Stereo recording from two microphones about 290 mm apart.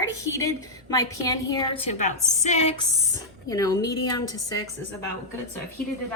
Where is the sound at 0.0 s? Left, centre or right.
Centre.